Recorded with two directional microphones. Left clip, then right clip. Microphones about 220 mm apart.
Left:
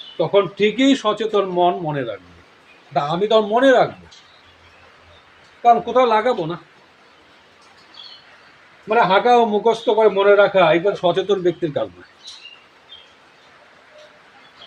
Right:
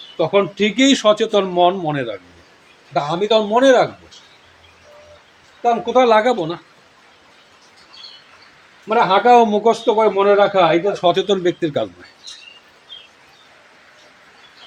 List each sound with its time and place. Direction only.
0.2 s speech: 35° right (ahead or behind)
2.9 s speech: 25° right (ahead or behind)
5.6 s speech: 30° right (ahead or behind)
9.0 s speech: 30° right (ahead or behind)